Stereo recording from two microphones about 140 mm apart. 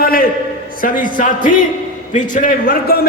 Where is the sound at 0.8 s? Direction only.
75° left (ahead or behind).